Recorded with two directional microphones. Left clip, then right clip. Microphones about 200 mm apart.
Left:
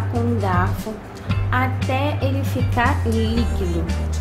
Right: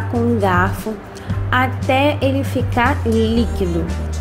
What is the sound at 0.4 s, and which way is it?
Speech, 30° right (ahead or behind).